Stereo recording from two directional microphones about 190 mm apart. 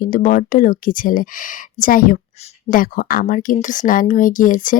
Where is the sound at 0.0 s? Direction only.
45° left (ahead or behind).